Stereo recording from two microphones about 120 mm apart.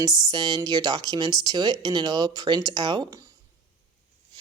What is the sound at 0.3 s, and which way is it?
Speech, 40° right (ahead or behind).